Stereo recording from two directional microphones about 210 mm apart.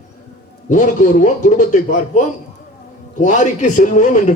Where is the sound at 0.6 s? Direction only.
35° left (ahead or behind).